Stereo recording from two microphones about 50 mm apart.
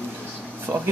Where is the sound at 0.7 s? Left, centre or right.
Right.